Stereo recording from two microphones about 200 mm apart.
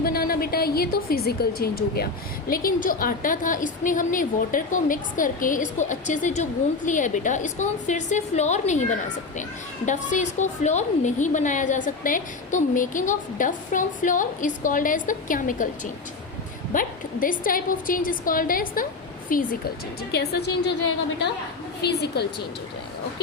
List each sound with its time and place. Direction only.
0.0 s a woman's voice: 50° left (ahead or behind)
16.7 s a woman's voice: 45° left (ahead or behind)